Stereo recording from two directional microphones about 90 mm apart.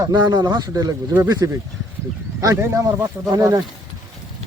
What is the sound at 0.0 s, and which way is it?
Speech, 50° right (ahead or behind).